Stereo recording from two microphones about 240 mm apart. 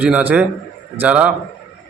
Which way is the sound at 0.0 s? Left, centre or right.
Centre.